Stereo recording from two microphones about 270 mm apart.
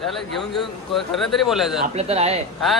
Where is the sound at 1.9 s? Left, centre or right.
Right.